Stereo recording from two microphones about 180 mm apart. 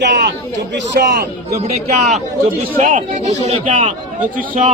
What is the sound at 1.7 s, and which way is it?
A man's voice, 40° right (ahead or behind).